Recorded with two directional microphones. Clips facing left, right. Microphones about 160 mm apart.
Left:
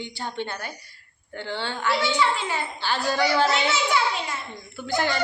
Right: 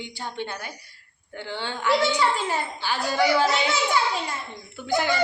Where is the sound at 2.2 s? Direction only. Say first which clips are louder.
Even; 40° right (ahead or behind).